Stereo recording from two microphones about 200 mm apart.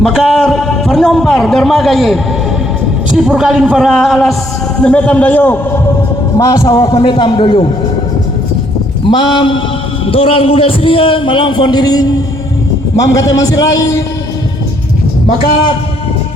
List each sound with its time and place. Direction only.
0.0 s a man's voice: centre (ahead or behind)
3.2 s a man's voice: 5° right (ahead or behind); by 7.7 s 25° left (ahead or behind)
9.0 s a man's voice: 25° left (ahead or behind)
13.3 s a man's voice: 20° left (ahead or behind)